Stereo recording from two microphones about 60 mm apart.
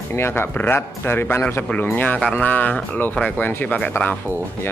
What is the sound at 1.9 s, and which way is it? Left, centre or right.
Speech, left.